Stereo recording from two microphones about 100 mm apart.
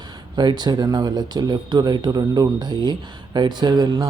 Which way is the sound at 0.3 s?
45° right (ahead or behind).